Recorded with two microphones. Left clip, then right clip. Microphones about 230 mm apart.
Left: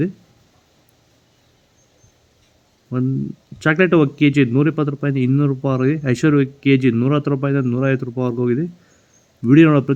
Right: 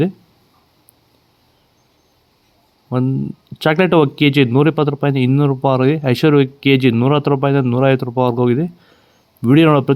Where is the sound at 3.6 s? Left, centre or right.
Centre.